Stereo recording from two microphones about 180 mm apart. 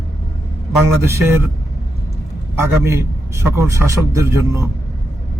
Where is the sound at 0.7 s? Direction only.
15° right (ahead or behind).